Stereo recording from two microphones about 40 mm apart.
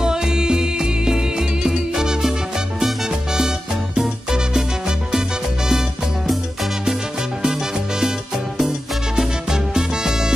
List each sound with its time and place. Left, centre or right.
0.0 s music: centre
8.5 s music: centre